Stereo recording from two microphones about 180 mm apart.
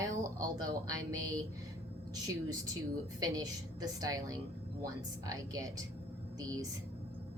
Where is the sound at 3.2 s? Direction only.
20° right (ahead or behind).